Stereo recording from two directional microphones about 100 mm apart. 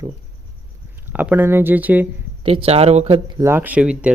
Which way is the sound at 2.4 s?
70° right (ahead or behind).